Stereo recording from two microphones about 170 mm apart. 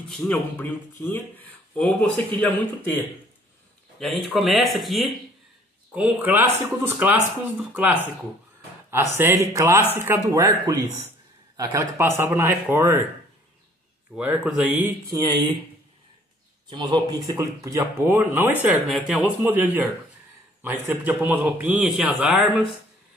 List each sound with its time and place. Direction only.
0.1 s speech: 10° left (ahead or behind)
4.0 s speech: centre (ahead or behind)
9.1 s speech: 15° right (ahead or behind)
14.1 s speech: 5° right (ahead or behind)
15.0 s speech: 20° right (ahead or behind)
16.6 s speech: 25° right (ahead or behind)
18.9 s speech: centre (ahead or behind)